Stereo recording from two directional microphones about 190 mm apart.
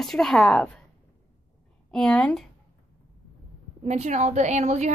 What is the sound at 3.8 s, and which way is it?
A woman's voice, 40° right (ahead or behind).